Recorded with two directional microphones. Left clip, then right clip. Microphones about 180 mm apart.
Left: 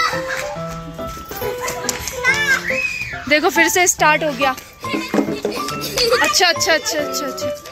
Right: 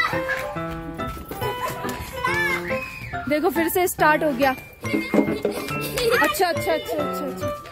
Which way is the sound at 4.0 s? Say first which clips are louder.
Left 3 dB; 25° right (ahead or behind).